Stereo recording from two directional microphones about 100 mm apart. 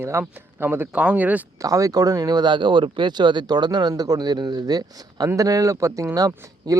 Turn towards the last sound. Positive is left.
turn(degrees=-35)  # may be behind; listen again after turning